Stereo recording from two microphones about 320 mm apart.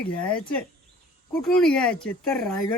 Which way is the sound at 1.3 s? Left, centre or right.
Centre.